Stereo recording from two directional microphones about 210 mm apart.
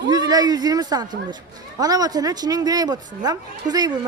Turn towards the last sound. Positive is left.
turn(degrees=-20)  # may be behind; listen again after turning